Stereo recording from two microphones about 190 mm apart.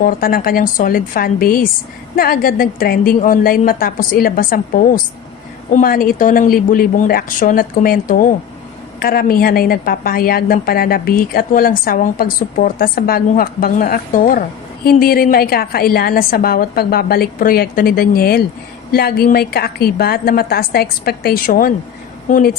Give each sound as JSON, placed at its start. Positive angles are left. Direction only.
{"t": 0.0, "sound": "a woman's voice", "side_deg": 50}